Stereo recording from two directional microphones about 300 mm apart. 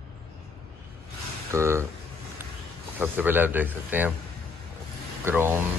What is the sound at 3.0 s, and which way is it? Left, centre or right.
Speech, centre.